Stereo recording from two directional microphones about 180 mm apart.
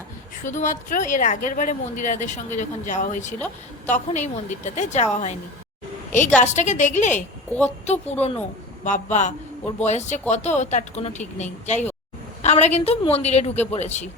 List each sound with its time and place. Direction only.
0.4 s a woman's voice: 45° left (ahead or behind)